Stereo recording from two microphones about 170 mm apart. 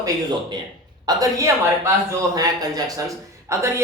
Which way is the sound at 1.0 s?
20° right (ahead or behind).